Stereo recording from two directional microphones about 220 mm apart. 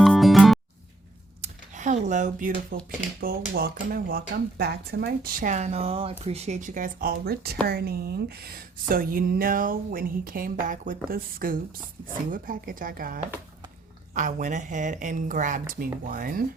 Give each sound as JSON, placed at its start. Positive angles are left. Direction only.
{"t": 0.0, "sound": "music", "side_deg": 0}
{"t": 1.4, "sound": "computer keyboard", "side_deg": -35}
{"t": 3.2, "sound": "speech", "side_deg": -45}